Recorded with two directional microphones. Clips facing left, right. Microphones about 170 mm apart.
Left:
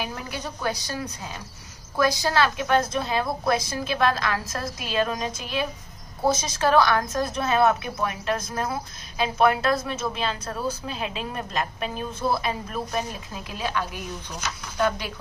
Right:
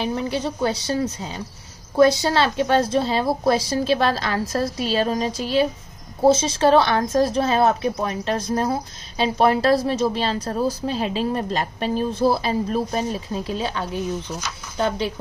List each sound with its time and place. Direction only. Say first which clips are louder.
0.0 s a woman's voice: right 8 dB; 25° right (ahead or behind)